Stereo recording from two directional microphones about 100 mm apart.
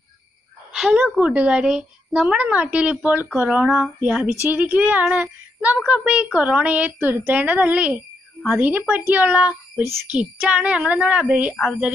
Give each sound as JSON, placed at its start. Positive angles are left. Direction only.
{"t": 0.7, "sound": "a woman's voice", "side_deg": -5}
{"t": 11.5, "sound": "speech", "side_deg": 0}